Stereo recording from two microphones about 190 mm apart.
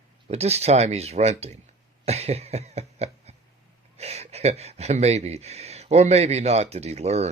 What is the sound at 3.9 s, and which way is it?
Speech, 35° right (ahead or behind).